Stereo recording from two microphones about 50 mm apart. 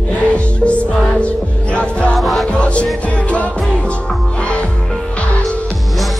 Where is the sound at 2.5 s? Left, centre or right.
Left.